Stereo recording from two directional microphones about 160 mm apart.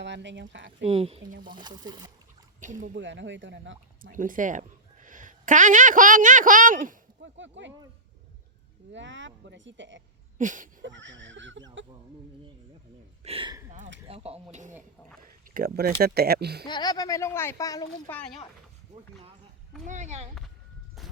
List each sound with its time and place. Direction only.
0.0 s speech: 90° right
0.8 s speech: 40° right (ahead or behind)
1.6 s speech: 25° right (ahead or behind)
2.6 s speech: 50° right (ahead or behind)
2.9 s speech: 90° right; by 7.0 s 55° right (ahead or behind)
10.3 s a sound: 50° right (ahead or behind)
13.2 s speech: 35° right (ahead or behind)
14.5 s speech: 50° right (ahead or behind)
15.2 s speech: 60° right (ahead or behind); by 16.6 s 90° right
16.6 s speech: 25° left (ahead or behind)
18.1 s speech: 10° left (ahead or behind)
19.8 s speech: 50° right (ahead or behind)
21.0 s a sound: centre (ahead or behind)